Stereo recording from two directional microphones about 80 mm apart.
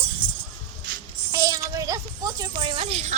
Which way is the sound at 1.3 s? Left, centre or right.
Right.